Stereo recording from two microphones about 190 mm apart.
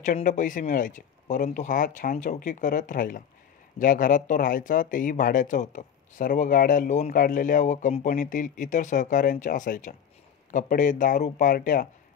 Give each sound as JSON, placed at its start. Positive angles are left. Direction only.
{"t": 0.0, "sound": "speech", "side_deg": 40}